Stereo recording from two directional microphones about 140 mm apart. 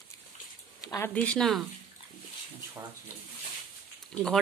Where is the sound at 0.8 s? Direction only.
25° left (ahead or behind).